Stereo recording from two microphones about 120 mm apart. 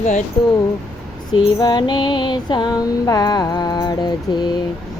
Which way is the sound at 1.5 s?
40° left (ahead or behind).